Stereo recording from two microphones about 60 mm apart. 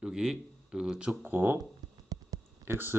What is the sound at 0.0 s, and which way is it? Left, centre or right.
Speech, centre.